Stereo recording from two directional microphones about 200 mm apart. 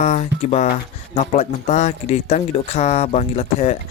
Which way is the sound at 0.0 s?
35° left (ahead or behind).